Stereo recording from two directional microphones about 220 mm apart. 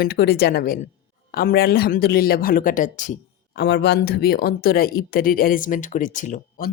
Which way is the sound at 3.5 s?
50° left (ahead or behind).